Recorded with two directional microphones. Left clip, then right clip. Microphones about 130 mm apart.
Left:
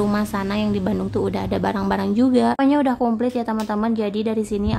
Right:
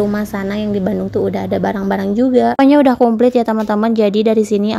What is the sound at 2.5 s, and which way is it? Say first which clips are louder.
A woman's voice: right 8 dB; 55° right (ahead or behind).